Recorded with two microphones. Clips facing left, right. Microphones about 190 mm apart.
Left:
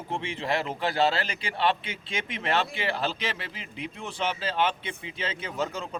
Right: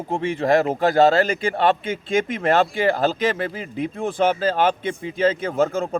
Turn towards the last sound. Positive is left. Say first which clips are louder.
# right 11 dB
turn(degrees=-50)  # may be behind; listen again after turning